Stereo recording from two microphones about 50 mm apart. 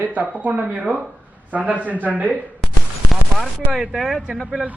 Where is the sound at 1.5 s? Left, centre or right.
Right.